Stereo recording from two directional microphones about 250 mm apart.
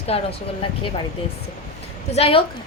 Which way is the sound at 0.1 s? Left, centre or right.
Left.